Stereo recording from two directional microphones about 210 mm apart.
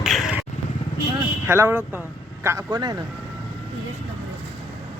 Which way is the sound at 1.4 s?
10° right (ahead or behind).